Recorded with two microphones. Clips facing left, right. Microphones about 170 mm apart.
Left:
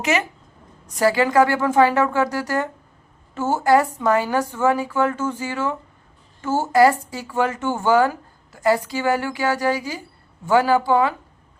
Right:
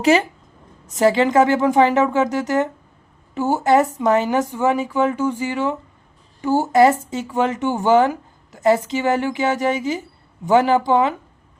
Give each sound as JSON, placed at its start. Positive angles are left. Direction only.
{"t": 0.0, "sound": "a woman's voice", "side_deg": -30}